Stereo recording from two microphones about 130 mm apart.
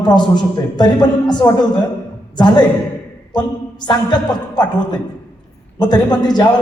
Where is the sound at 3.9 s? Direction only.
30° left (ahead or behind).